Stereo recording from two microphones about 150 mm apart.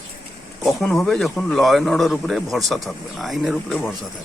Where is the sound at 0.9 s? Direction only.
Centre (ahead or behind).